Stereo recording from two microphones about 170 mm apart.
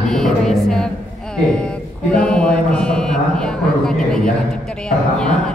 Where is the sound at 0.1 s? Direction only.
5° left (ahead or behind).